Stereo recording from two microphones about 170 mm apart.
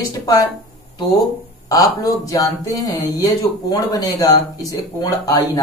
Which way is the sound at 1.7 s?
20° left (ahead or behind).